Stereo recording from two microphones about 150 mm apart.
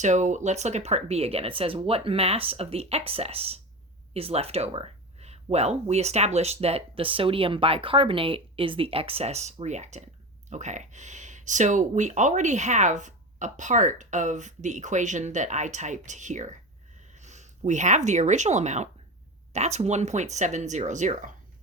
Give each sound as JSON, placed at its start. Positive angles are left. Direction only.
{"t": 0.0, "sound": "speech", "side_deg": -55}